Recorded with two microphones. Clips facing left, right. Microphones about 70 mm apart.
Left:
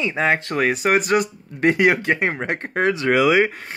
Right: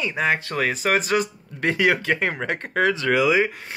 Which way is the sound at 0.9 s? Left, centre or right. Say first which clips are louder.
Left 3 dB; left.